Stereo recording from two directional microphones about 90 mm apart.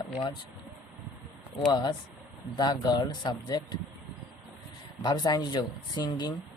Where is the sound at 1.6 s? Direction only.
50° left (ahead or behind).